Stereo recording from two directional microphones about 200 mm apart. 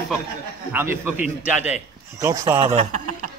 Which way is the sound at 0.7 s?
10° right (ahead or behind).